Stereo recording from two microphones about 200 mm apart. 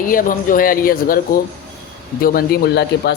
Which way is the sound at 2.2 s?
45° left (ahead or behind).